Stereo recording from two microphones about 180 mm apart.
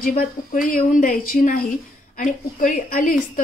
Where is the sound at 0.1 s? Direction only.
45° left (ahead or behind).